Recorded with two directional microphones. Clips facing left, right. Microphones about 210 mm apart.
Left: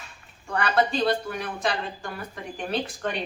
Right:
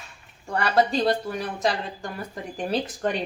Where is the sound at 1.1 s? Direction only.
40° right (ahead or behind).